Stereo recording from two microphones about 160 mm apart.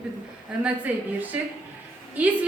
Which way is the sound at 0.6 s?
10° right (ahead or behind).